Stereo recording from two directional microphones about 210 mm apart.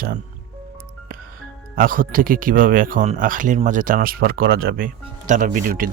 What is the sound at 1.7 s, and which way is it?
Speech, 40° right (ahead or behind).